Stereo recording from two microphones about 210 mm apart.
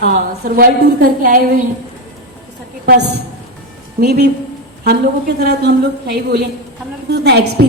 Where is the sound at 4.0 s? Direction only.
50° right (ahead or behind).